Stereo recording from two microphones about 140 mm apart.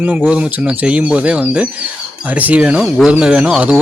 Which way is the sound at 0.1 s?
10° right (ahead or behind).